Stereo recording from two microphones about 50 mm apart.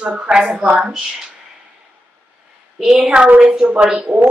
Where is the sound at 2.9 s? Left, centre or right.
Right.